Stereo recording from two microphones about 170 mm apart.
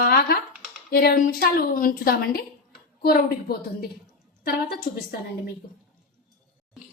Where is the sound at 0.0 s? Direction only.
60° left (ahead or behind).